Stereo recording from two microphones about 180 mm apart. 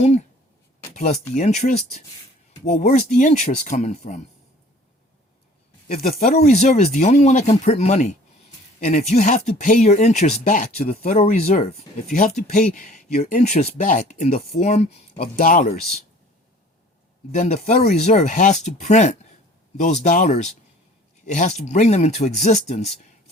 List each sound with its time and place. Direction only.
0.0 s speech: 35° left (ahead or behind)
5.9 s speech: 50° left (ahead or behind)
6.3 s speech: 40° left (ahead or behind)
15.2 s speech: 50° left (ahead or behind)
17.3 s speech: 40° left (ahead or behind)